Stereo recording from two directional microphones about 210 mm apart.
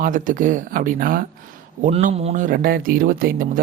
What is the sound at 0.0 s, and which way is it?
Speech, 40° right (ahead or behind).